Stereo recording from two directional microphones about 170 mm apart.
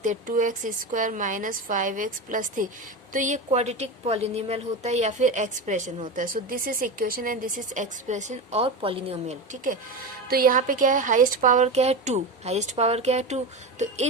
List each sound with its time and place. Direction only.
0.0 s a woman's voice: 50° right (ahead or behind)
10.2 s a woman's voice: 60° right (ahead or behind); by 14.1 s 40° right (ahead or behind)